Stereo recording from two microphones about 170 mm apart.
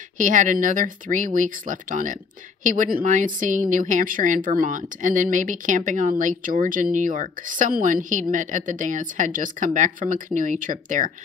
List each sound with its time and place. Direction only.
0.2 s speech: 50° right (ahead or behind)